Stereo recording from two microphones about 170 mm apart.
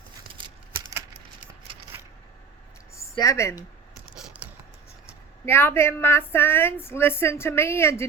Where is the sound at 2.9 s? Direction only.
20° left (ahead or behind).